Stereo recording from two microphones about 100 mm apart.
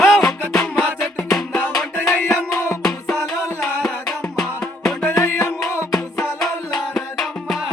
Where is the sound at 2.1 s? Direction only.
20° left (ahead or behind).